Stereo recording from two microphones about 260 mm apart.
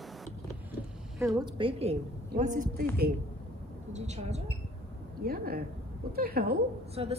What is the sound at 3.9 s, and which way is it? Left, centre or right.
A woman's voice, right.